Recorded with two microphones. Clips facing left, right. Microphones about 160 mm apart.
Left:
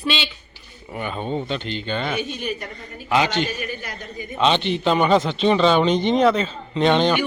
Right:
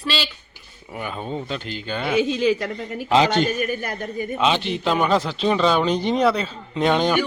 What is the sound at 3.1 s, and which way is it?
A man's voice, 35° right (ahead or behind).